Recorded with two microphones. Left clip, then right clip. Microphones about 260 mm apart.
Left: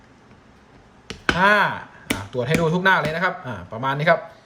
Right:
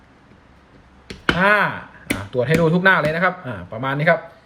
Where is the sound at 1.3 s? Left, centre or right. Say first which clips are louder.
Right 1 dB; centre.